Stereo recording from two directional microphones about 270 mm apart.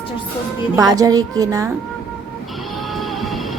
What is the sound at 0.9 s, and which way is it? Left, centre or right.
Speech, centre.